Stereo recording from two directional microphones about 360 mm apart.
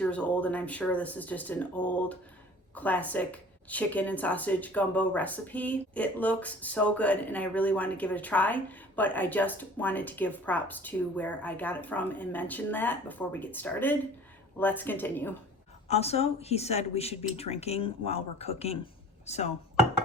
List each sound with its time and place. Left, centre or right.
0.0 s speech: centre
15.9 s speech: centre